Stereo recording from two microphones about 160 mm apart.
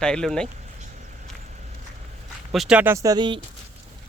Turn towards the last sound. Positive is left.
turn(degrees=-30)  # may be behind; listen again after turning